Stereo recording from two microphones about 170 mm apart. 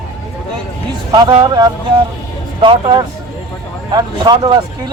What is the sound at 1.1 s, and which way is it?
Speech, 25° right (ahead or behind).